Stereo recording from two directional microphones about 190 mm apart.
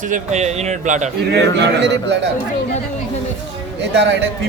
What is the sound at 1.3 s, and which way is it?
Speech, 65° right (ahead or behind).